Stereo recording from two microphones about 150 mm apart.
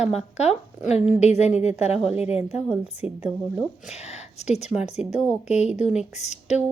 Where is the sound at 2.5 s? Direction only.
10° right (ahead or behind).